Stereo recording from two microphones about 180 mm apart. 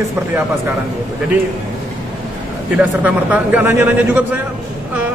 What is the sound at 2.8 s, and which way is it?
A man's voice, 10° right (ahead or behind).